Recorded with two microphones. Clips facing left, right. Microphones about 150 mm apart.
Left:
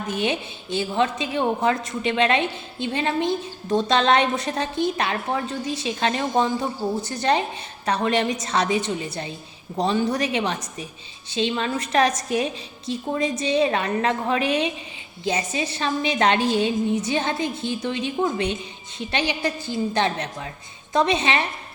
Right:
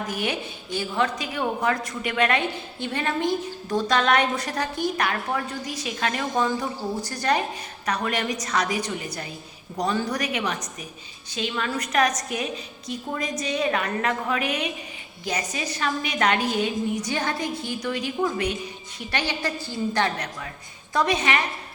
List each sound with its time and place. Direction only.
0.1 s a woman's voice: 25° left (ahead or behind)